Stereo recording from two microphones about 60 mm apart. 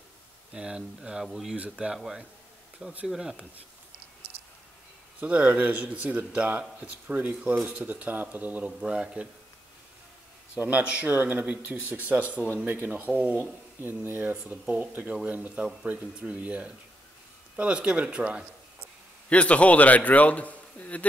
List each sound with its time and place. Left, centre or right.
0.5 s speech: centre
1.6 s dishes: centre
2.0 s speech: centre
5.2 s dishes: right
7.3 s speech: centre
7.7 s dishes: right
10.8 s dishes: right
12.6 s speech: right
14.5 s dishes: right
19.2 s a man's voice: left